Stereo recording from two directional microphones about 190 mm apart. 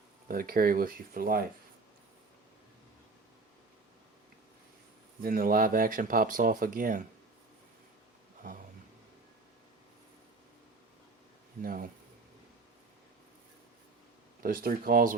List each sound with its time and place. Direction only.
0.3 s speech: 50° right (ahead or behind)
5.2 s speech: 50° right (ahead or behind)
8.4 s a sound: 45° right (ahead or behind)
11.6 s speech: 50° right (ahead or behind)
14.4 s speech: 50° right (ahead or behind)